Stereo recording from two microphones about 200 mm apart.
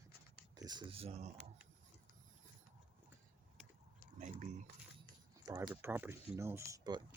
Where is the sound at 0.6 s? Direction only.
20° right (ahead or behind).